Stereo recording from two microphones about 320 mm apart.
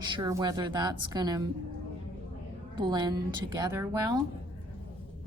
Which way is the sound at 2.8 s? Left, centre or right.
Centre.